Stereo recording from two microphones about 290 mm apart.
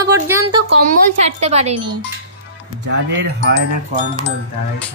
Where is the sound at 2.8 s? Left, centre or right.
Right.